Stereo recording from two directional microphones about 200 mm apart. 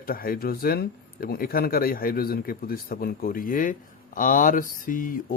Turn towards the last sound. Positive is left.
turn(degrees=45)  # may be behind; listen again after turning